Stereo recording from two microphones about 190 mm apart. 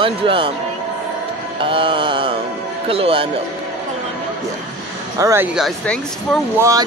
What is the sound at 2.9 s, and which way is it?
Speech, 30° right (ahead or behind).